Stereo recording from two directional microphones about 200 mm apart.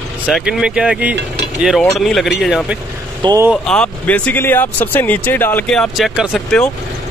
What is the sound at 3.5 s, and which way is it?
Speech, 5° left (ahead or behind).